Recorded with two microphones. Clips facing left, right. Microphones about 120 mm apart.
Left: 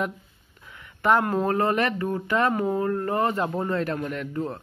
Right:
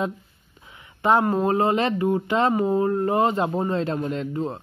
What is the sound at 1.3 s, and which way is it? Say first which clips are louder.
Speech: right 2 dB; 20° right (ahead or behind).